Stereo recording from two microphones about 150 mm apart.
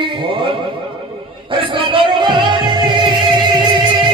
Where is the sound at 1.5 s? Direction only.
35° right (ahead or behind).